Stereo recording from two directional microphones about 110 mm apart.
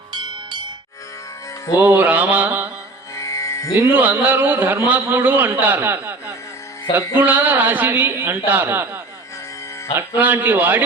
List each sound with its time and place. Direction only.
0.1 s music: 45° right (ahead or behind)
1.8 s a man's voice: 15° right (ahead or behind)
3.2 s music: 25° left (ahead or behind)
3.8 s a man's voice: 15° right (ahead or behind)
10.2 s a man's voice: 15° right (ahead or behind)